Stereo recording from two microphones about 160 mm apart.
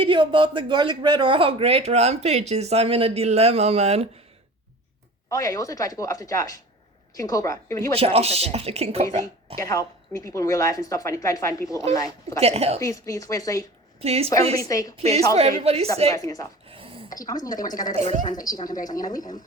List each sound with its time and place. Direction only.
0.0 s speech: 30° right (ahead or behind)
5.3 s speech: 20° left (ahead or behind)
7.9 s speech: 40° right (ahead or behind)
9.6 s speech: 20° left (ahead or behind)
12.4 s speech: 40° right (ahead or behind)
12.8 s speech: 20° left (ahead or behind)
14.0 s speech: 40° right (ahead or behind)
14.5 s speech: 20° left (ahead or behind)
15.4 s speech: 40° right (ahead or behind)
16.1 s speech: 20° left (ahead or behind)
16.6 s a sound: 35° right (ahead or behind)
17.1 s speech: 25° left (ahead or behind)
17.9 s a woman's voice: 45° right (ahead or behind)
18.3 s speech: 25° left (ahead or behind)